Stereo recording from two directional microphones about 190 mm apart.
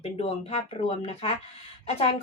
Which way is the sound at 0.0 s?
30° left (ahead or behind).